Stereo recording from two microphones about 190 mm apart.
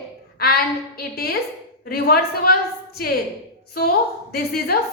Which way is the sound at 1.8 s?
55° left (ahead or behind).